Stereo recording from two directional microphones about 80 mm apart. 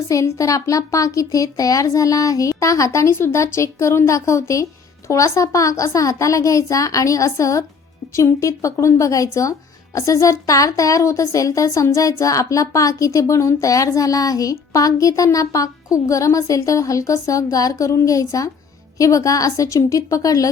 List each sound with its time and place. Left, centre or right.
0.1 s speech: left